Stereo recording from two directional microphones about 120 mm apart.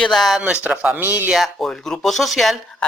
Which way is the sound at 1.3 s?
Centre (ahead or behind).